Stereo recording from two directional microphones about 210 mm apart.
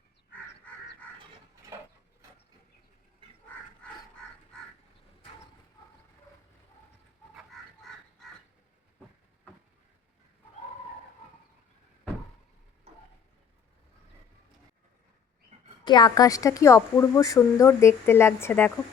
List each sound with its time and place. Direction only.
1.7 s mechanisms: 10° right (ahead or behind)
3.2 s dog: 25° right (ahead or behind)
15.8 s a woman's voice: 20° left (ahead or behind)